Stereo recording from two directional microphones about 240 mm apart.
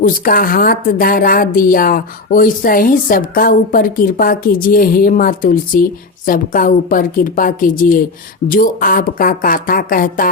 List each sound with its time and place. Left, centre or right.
0.0 s a woman's voice: left